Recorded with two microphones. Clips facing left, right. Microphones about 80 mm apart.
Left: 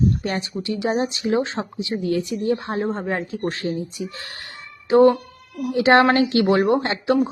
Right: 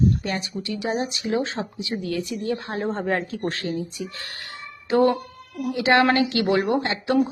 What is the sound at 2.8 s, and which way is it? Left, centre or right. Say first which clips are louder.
Speech: even; centre.